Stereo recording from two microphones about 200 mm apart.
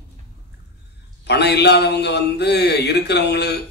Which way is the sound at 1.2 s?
55° left (ahead or behind).